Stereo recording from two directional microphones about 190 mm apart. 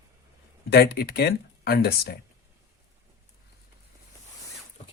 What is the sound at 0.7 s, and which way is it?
Speech, 55° left (ahead or behind).